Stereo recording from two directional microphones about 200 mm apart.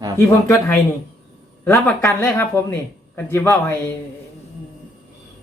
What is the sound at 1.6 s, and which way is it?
Speech, 10° left (ahead or behind).